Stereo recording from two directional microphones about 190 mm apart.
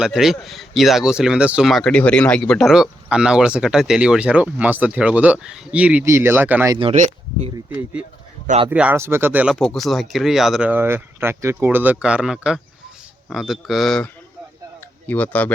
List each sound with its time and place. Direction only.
0.0 s speech: centre (ahead or behind)
6.7 s speech: 30° right (ahead or behind)
8.4 s speech: 30° right (ahead or behind)
8.7 s speech: 10° right (ahead or behind); by 15.5 s 10° left (ahead or behind)